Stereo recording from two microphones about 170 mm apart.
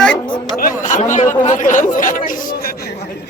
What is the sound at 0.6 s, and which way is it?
Speech, 50° left (ahead or behind).